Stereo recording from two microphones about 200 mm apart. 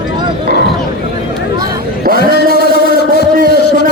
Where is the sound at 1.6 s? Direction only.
45° right (ahead or behind).